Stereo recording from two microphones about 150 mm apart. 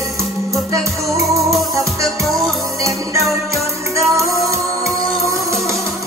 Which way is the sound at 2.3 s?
Centre (ahead or behind).